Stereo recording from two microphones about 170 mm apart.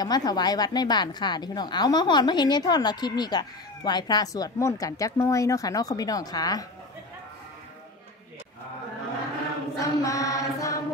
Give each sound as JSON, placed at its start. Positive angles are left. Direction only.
{"t": 0.0, "sound": "a woman's voice", "side_deg": 25}
{"t": 9.8, "sound": "mantra", "side_deg": 20}